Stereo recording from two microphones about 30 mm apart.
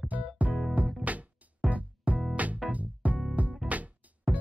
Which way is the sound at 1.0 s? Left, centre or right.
Right.